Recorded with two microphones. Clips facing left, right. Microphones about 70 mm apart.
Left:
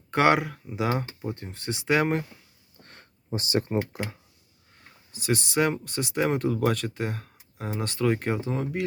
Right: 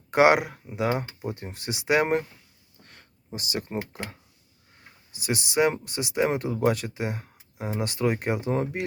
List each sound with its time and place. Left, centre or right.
0.1 s speech: centre
0.8 s speech: centre
1.2 s speech: centre
2.9 s a sound: left
3.7 s speech: centre
5.1 s speech: centre
8.4 s speech: right